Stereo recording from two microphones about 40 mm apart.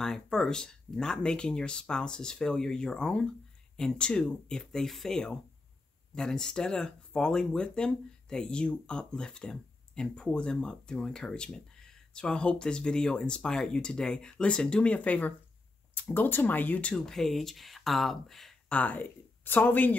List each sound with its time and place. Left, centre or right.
0.0 s speech: centre
15.0 s speech: left
15.9 s speech: left
17.0 s speech: centre
18.7 s speech: left
19.4 s speech: left